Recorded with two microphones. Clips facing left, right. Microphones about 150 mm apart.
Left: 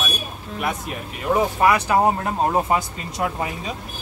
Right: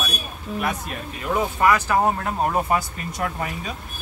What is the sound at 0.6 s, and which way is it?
Speech, 15° left (ahead or behind).